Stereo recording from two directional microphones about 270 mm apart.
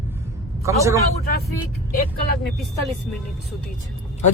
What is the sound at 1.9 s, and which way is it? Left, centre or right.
Speech, left.